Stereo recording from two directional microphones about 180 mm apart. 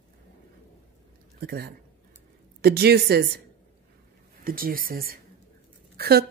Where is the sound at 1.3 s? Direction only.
60° right (ahead or behind).